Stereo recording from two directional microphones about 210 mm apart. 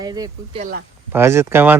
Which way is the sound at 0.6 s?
40° right (ahead or behind).